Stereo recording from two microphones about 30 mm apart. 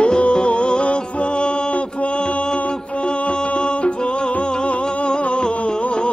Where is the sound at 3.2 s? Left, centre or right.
Left.